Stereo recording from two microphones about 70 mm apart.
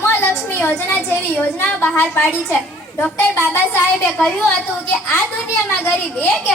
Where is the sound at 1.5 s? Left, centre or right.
Left.